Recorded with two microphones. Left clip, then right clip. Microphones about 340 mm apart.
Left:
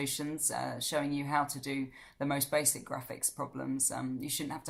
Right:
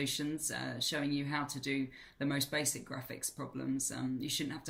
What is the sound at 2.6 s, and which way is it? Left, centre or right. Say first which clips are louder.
Speech: left 4 dB; left.